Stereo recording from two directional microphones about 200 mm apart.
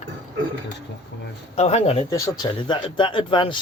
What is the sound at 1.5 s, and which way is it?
Speech, 30° left (ahead or behind).